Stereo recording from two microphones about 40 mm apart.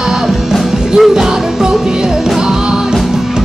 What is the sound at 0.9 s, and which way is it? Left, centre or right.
Music, centre.